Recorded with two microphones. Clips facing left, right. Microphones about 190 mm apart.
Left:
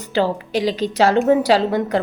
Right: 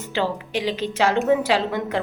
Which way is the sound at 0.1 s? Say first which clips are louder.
Left 5 dB; 35° left (ahead or behind).